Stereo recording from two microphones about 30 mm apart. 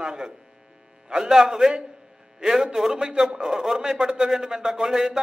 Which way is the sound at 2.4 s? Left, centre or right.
Right.